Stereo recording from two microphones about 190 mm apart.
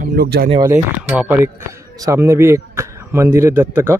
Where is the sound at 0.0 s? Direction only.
55° right (ahead or behind).